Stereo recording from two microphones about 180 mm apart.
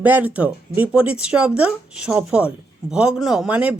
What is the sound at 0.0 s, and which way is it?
Speech, 10° right (ahead or behind).